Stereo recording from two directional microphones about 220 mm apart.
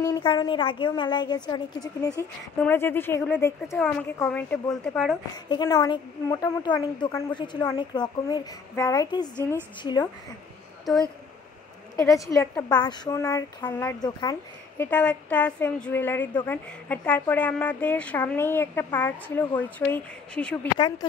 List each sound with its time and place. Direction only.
0.0 s a woman's voice: 20° left (ahead or behind)
5.3 s a woman's voice: 20° left (ahead or behind)
10.9 s a woman's voice: centre (ahead or behind)
12.3 s a woman's voice: 15° left (ahead or behind)
14.8 s a woman's voice: 5° left (ahead or behind)